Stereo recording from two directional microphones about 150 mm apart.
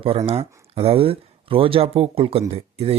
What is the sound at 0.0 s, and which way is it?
Speech, 40° right (ahead or behind).